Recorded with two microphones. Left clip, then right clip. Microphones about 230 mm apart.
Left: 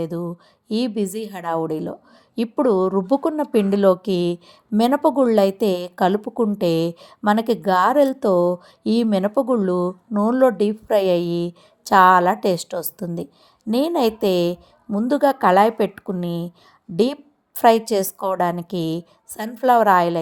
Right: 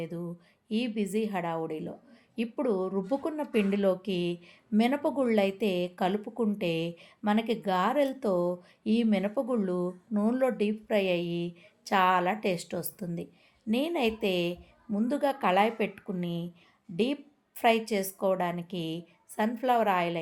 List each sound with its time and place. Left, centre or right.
0.0 s a woman's voice: left
17.6 s a woman's voice: left